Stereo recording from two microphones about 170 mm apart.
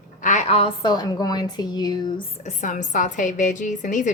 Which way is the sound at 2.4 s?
45° left (ahead or behind).